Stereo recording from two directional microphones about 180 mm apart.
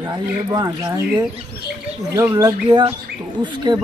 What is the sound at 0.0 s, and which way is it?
Speech, 25° right (ahead or behind).